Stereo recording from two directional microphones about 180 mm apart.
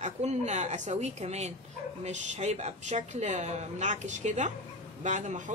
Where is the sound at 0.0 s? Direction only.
40° right (ahead or behind).